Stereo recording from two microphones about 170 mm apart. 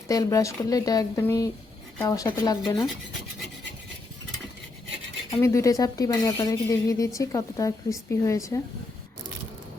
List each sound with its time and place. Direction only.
0.1 s speech: 20° left (ahead or behind)
5.3 s speech: 15° left (ahead or behind)